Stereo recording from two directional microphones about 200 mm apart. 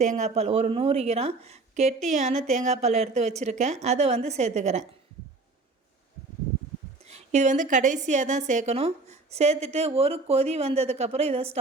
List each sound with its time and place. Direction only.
0.0 s a woman's voice: 35° right (ahead or behind)
7.0 s a woman's voice: 35° right (ahead or behind)